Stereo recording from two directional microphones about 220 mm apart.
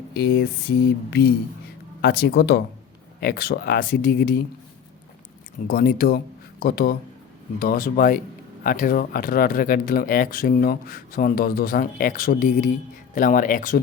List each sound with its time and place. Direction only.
0.1 s a sound: 45° left (ahead or behind)
2.0 s speech: 45° left (ahead or behind)
5.6 s speech: 45° left (ahead or behind)